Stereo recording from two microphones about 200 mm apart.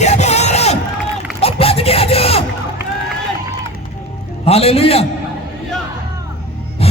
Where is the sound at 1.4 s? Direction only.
30° left (ahead or behind).